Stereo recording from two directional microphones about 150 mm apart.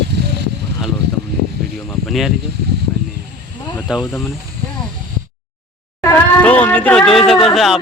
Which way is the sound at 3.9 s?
5° right (ahead or behind).